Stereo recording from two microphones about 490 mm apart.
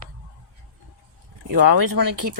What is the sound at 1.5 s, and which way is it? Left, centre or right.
Speech, right.